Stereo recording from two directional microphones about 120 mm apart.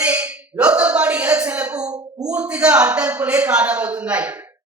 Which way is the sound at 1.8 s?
30° right (ahead or behind).